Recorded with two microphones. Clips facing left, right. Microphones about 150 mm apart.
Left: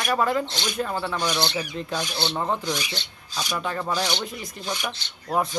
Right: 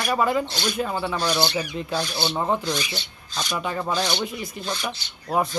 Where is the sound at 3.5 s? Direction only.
5° right (ahead or behind).